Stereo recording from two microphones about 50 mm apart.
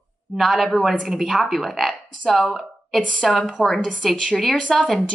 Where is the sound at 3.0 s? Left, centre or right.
Centre.